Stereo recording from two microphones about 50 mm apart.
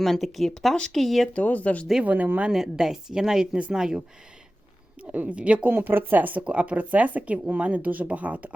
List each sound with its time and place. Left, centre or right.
0.0 s speech: centre
1.3 s speech: left
2.0 s speech: right
2.5 s a woman's voice: centre
5.1 s speech: right
5.7 s speech: right
6.4 s speech: right